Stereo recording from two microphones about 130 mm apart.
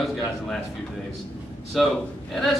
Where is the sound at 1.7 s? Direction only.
Centre (ahead or behind).